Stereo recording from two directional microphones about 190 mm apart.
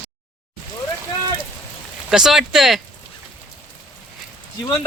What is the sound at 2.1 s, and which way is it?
Speech, centre (ahead or behind).